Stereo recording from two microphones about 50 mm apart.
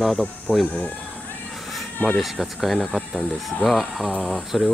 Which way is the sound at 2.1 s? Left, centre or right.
Centre.